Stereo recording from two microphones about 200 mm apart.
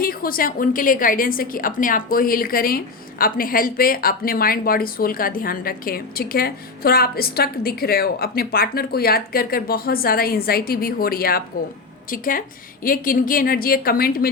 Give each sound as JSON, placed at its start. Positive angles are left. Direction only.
{"t": 0.0, "sound": "a woman's voice", "side_deg": 45}